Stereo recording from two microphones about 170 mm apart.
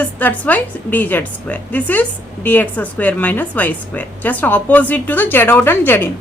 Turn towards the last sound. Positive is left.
turn(degrees=10)  # may be behind; listen again after turning